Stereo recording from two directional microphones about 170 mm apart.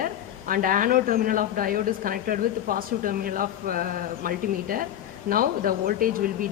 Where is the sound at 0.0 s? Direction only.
55° right (ahead or behind).